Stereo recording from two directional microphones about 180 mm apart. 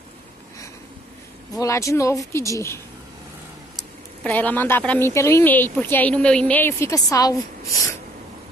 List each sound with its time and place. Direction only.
1.5 s a woman's voice: 20° left (ahead or behind)
4.2 s a woman's voice: 10° left (ahead or behind)